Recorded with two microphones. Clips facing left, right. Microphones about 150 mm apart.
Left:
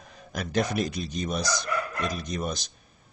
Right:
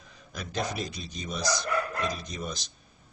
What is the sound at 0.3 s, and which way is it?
Speech, 60° left (ahead or behind).